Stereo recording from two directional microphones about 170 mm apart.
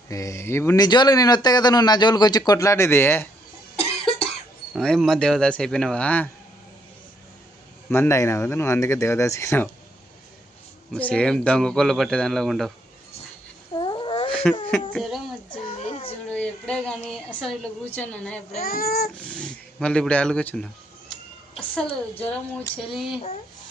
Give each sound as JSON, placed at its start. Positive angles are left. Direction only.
{"t": 0.1, "sound": "speech", "side_deg": 20}
{"t": 3.8, "sound": "cough", "side_deg": 35}
{"t": 4.7, "sound": "a woman's voice", "side_deg": 5}
{"t": 7.9, "sound": "speech", "side_deg": 15}
{"t": 10.9, "sound": "a woman's voice", "side_deg": 5}
{"t": 13.7, "sound": "a sound", "side_deg": 25}
{"t": 14.3, "sound": "a sound", "side_deg": 5}
{"t": 15.8, "sound": "baby cry", "side_deg": 35}
{"t": 16.3, "sound": "a woman's voice", "side_deg": 5}
{"t": 18.6, "sound": "speech", "side_deg": 60}
{"t": 19.3, "sound": "a woman's voice", "side_deg": 5}
{"t": 21.8, "sound": "a woman's voice", "side_deg": 35}